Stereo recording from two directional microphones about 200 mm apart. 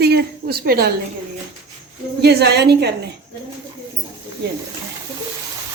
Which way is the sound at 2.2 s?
55° right (ahead or behind).